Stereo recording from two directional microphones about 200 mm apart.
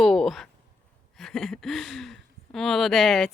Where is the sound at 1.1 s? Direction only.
Centre (ahead or behind).